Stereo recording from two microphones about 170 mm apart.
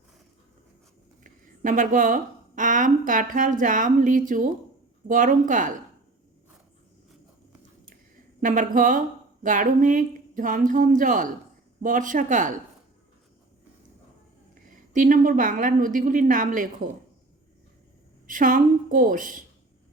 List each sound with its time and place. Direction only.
1.2 s a woman's voice: 50° right (ahead or behind)
8.4 s speech: 50° right (ahead or behind)
14.9 s speech: 50° right (ahead or behind)
18.3 s speech: 50° right (ahead or behind)